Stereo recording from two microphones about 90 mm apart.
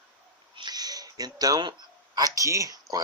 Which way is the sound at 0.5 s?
50° right (ahead or behind).